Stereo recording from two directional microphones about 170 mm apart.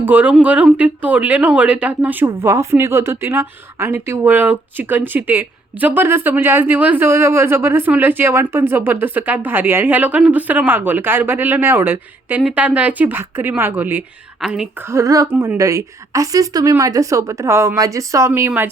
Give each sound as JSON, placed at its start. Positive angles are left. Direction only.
{"t": 0.0, "sound": "a woman's voice", "side_deg": -10}
{"t": 14.8, "sound": "a woman's voice", "side_deg": -20}